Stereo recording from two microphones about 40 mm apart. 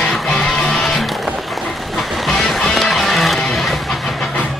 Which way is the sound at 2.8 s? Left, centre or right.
Centre.